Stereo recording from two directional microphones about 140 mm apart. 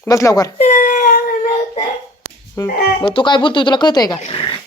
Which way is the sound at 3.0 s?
35° left (ahead or behind).